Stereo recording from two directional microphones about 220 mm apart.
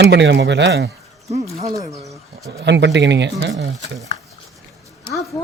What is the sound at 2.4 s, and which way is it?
Speech, 50° right (ahead or behind).